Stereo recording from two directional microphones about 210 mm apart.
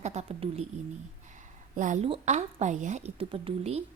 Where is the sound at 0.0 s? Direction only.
30° right (ahead or behind).